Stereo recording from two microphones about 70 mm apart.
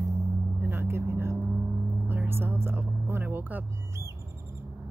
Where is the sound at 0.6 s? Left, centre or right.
Right.